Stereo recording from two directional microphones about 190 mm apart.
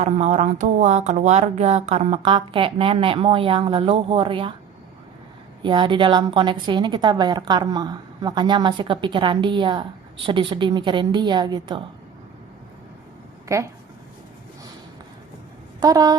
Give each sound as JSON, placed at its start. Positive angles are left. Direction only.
{"t": 0.0, "sound": "speech", "side_deg": -35}
{"t": 5.6, "sound": "speech", "side_deg": -25}
{"t": 13.5, "sound": "speech", "side_deg": -15}
{"t": 15.8, "sound": "speech", "side_deg": -20}